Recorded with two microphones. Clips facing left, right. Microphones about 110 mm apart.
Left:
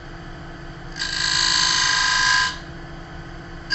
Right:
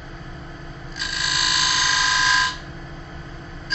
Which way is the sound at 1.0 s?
Centre (ahead or behind).